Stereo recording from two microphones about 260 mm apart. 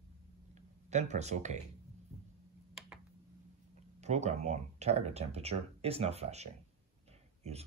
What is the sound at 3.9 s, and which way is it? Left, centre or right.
Speech, right.